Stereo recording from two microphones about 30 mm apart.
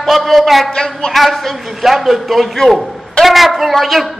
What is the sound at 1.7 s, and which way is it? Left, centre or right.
A man's voice, centre.